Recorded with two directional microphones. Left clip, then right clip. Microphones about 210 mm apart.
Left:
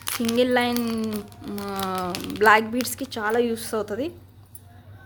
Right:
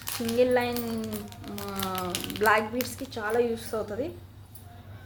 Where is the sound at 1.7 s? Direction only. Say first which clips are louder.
Left 4 dB; 45° left (ahead or behind).